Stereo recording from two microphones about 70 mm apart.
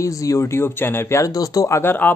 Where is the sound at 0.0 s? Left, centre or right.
Left.